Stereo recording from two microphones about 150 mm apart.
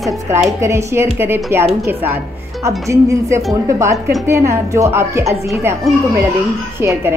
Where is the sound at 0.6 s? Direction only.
20° right (ahead or behind).